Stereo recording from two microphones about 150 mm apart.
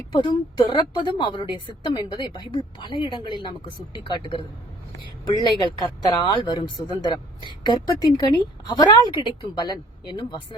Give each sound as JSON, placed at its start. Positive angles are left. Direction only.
{"t": 0.1, "sound": "a woman's voice", "side_deg": 35}